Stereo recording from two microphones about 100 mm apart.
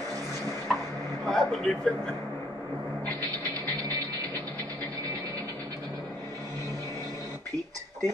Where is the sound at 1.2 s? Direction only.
5° left (ahead or behind).